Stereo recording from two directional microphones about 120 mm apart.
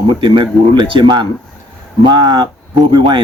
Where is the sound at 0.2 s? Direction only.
40° right (ahead or behind).